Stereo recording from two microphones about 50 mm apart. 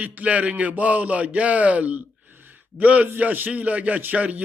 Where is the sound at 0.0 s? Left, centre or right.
Right.